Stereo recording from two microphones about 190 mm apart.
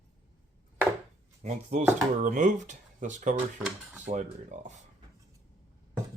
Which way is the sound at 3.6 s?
5° right (ahead or behind).